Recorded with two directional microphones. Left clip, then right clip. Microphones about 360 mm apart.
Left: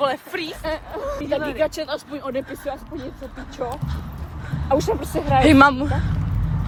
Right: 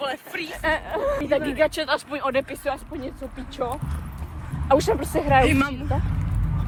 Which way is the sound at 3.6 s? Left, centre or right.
Right.